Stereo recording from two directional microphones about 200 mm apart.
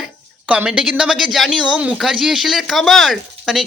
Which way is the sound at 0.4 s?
5° right (ahead or behind).